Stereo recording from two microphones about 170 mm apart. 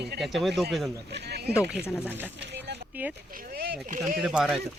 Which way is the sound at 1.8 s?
10° left (ahead or behind).